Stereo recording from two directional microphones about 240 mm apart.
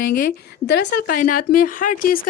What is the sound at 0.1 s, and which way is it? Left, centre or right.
A woman's voice, left.